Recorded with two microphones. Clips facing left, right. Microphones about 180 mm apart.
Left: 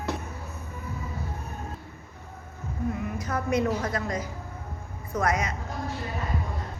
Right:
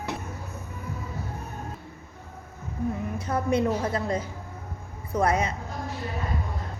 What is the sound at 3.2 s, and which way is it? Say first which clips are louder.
A woman's voice: right 2 dB; 30° right (ahead or behind).